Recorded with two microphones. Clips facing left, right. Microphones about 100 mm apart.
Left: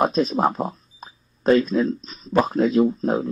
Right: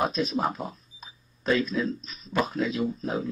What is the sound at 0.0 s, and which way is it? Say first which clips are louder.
Speech: left 7 dB; 40° left (ahead or behind).